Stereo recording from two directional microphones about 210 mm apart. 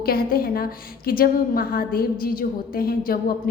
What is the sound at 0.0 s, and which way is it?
A woman's voice, 45° left (ahead or behind).